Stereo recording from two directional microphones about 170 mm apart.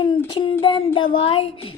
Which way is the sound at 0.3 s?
30° left (ahead or behind).